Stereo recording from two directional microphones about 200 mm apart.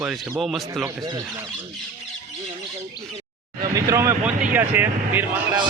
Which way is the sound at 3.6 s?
15° right (ahead or behind).